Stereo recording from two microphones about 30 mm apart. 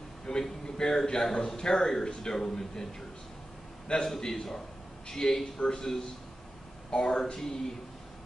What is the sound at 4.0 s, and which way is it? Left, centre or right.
Speech, centre.